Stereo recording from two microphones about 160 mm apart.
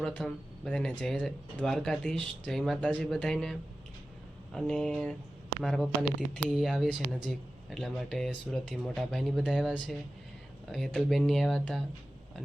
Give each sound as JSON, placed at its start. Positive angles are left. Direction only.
{"t": 0.0, "sound": "speech", "side_deg": 0}